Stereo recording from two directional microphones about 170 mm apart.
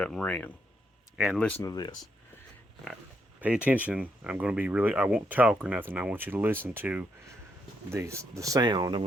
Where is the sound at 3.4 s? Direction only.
10° right (ahead or behind).